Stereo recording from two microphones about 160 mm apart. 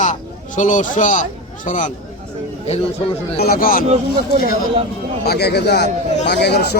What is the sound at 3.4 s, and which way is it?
Speech, 65° left (ahead or behind).